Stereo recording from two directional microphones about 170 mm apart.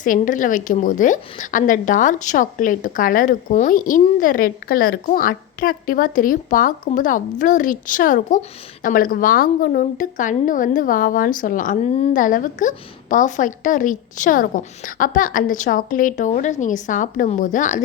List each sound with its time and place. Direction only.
0.0 s a woman's voice: 50° left (ahead or behind)